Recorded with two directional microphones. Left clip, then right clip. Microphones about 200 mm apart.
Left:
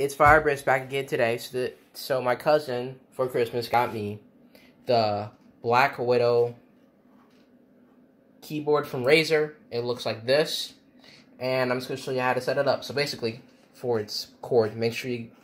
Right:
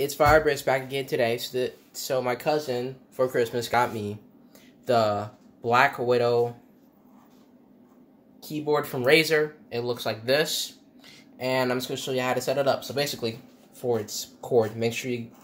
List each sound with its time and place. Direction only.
0.0 s speech: centre (ahead or behind)
8.4 s speech: 10° left (ahead or behind)
14.0 s speech: 40° left (ahead or behind)
14.4 s speech: 10° left (ahead or behind)